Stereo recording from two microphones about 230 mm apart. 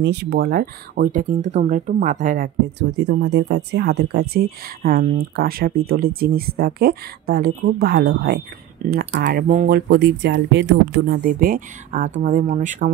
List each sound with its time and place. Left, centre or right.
0.0 s speech: right
3.0 s speech: right